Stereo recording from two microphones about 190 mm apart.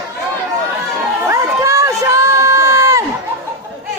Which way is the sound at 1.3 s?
15° right (ahead or behind).